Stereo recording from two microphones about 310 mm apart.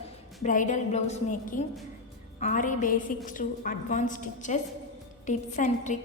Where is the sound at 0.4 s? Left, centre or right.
Left.